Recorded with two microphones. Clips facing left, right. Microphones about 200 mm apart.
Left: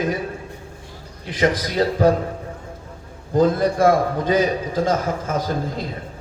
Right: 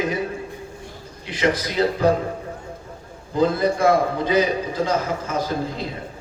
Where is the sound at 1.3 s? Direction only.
50° left (ahead or behind).